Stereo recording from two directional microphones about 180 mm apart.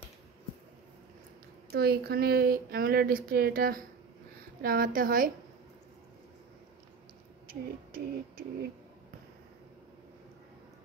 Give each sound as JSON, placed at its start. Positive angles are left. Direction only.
{"t": 1.7, "sound": "a woman's voice", "side_deg": -60}
{"t": 7.4, "sound": "speech", "side_deg": -55}